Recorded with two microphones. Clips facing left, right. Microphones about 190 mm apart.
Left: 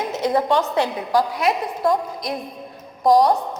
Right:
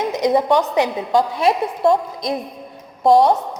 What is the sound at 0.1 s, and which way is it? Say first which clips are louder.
A woman's voice: right 3 dB; 15° right (ahead or behind).